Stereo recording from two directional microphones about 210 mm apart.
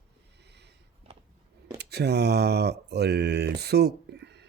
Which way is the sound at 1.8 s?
50° right (ahead or behind).